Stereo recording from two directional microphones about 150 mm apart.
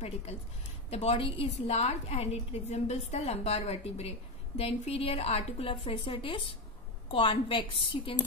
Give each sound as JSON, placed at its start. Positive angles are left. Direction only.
{"t": 0.0, "sound": "a woman's voice", "side_deg": 45}